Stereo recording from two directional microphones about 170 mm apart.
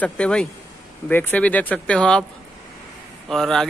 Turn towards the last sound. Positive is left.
turn(degrees=0)  # may be behind; listen again after turning